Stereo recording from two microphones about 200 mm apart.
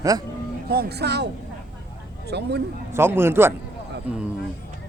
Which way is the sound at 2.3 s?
55° right (ahead or behind).